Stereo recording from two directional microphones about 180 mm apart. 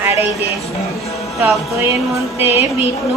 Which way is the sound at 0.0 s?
10° right (ahead or behind).